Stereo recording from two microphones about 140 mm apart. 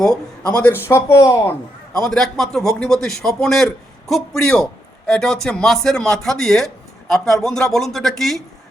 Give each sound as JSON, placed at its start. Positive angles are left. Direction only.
{"t": 0.0, "sound": "speech", "side_deg": 5}
{"t": 2.0, "sound": "a man's voice", "side_deg": 5}